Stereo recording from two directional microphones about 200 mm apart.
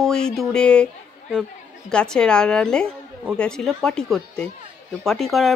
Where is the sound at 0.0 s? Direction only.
5° left (ahead or behind).